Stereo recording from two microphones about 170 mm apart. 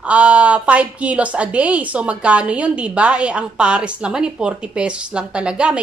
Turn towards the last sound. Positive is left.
turn(degrees=-5)  # may be behind; listen again after turning